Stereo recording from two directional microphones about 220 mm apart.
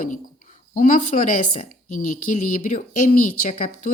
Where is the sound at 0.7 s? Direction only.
35° left (ahead or behind).